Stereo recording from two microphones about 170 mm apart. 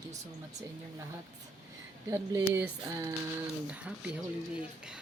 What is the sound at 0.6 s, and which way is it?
Speech, 20° right (ahead or behind).